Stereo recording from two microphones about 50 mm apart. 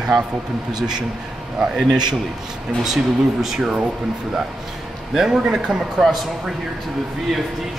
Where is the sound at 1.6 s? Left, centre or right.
Centre.